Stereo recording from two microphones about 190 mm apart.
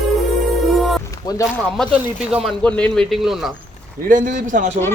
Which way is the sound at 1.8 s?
5° right (ahead or behind).